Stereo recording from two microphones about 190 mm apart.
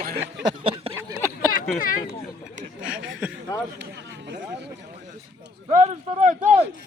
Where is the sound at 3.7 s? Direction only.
65° right (ahead or behind).